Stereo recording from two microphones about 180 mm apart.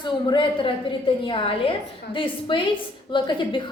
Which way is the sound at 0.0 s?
25° left (ahead or behind).